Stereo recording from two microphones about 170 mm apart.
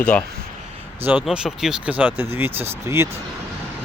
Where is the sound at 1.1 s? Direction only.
5° right (ahead or behind).